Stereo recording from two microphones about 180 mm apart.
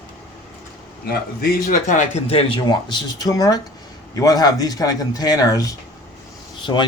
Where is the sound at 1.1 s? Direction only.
50° left (ahead or behind).